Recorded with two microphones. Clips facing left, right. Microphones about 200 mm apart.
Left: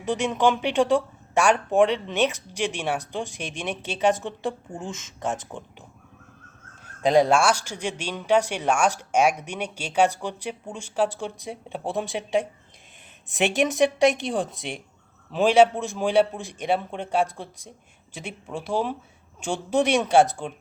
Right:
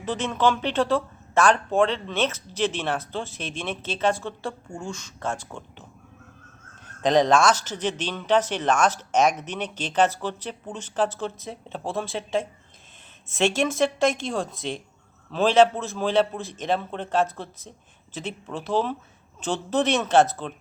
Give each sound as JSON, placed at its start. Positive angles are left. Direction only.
{"t": 0.0, "sound": "speech", "side_deg": 15}
{"t": 7.0, "sound": "speech", "side_deg": 10}